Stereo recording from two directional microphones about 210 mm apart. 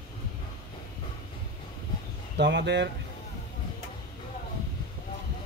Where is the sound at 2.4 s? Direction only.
55° right (ahead or behind).